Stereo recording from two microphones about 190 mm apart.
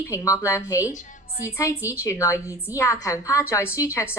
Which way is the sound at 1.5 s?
15° left (ahead or behind).